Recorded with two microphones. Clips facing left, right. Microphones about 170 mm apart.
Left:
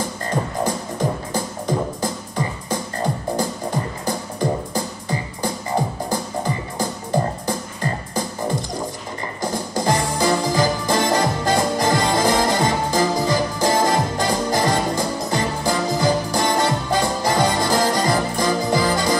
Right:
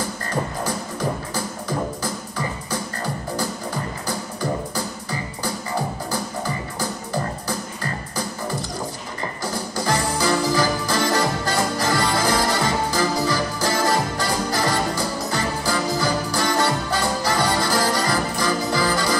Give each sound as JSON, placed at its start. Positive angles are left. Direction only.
{"t": 0.7, "sound": "music", "side_deg": 20}